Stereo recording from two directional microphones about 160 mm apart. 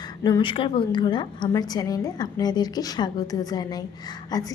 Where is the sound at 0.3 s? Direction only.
30° left (ahead or behind).